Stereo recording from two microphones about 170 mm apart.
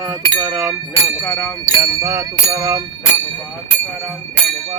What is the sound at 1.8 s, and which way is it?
Speech, 15° right (ahead or behind).